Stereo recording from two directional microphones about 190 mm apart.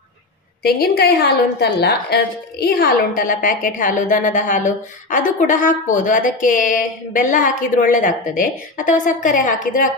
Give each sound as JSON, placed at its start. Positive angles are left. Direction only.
{"t": 0.7, "sound": "a woman's voice", "side_deg": 55}